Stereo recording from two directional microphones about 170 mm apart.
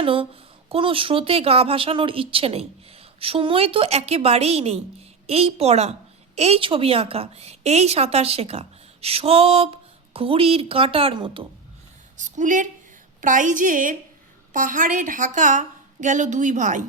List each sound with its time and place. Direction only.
0.0 s a woman's voice: 30° right (ahead or behind)
12.1 s a woman's voice: 45° right (ahead or behind)